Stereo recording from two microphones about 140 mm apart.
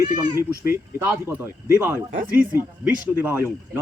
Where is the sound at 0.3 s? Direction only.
20° right (ahead or behind).